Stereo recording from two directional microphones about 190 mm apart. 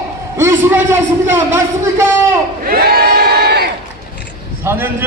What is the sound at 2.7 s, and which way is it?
Crowd, 50° right (ahead or behind).